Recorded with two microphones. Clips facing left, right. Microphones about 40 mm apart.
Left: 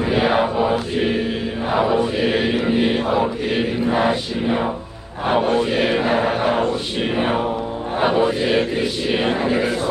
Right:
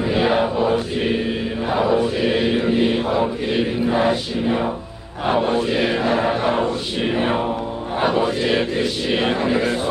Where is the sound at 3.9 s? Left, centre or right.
Centre.